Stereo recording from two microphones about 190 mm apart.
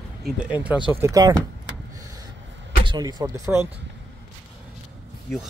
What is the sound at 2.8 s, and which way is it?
Speech, 20° right (ahead or behind).